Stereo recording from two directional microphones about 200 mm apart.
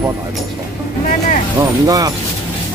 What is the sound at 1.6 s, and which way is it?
Speech, 15° right (ahead or behind).